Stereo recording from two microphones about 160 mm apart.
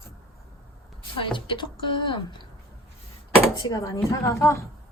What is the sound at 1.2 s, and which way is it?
A woman's voice, 30° left (ahead or behind).